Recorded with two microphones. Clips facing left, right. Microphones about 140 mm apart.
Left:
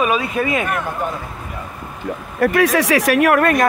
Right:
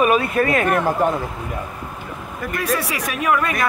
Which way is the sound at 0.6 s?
35° right (ahead or behind).